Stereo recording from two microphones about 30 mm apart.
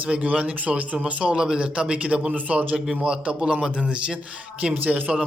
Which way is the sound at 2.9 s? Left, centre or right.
Right.